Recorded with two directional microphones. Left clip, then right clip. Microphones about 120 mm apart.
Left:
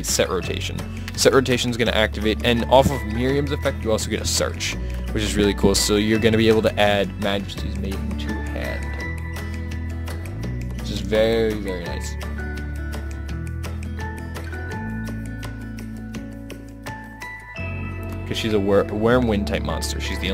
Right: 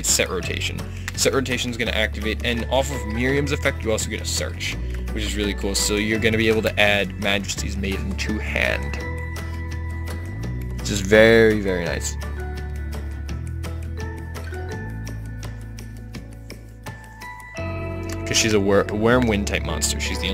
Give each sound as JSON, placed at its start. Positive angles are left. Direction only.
{"t": 0.2, "sound": "speech", "side_deg": 25}
{"t": 3.2, "sound": "speech", "side_deg": 15}
{"t": 3.4, "sound": "speech", "side_deg": 5}
{"t": 4.1, "sound": "speech", "side_deg": 50}
{"t": 5.9, "sound": "speech", "side_deg": 35}
{"t": 7.5, "sound": "speech", "side_deg": 0}
{"t": 10.9, "sound": "speech", "side_deg": -30}
{"t": 18.3, "sound": "speech", "side_deg": 0}